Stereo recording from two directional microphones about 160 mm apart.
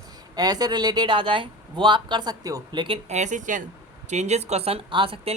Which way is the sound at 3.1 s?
50° right (ahead or behind).